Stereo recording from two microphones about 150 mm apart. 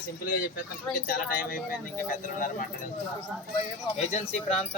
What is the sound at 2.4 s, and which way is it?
Speech, 60° left (ahead or behind).